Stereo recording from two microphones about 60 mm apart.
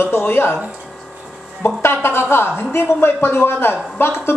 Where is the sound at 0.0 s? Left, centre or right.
Left.